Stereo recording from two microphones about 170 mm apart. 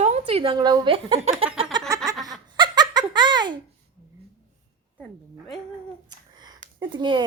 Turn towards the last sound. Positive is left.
turn(degrees=-25)  # may be behind; listen again after turning